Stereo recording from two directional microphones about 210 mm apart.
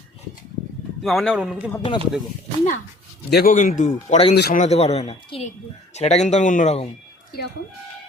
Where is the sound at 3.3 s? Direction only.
40° left (ahead or behind).